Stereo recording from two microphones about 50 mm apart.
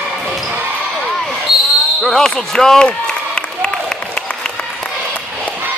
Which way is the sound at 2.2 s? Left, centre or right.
Centre.